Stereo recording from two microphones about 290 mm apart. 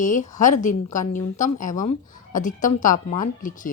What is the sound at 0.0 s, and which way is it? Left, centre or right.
Speech, left.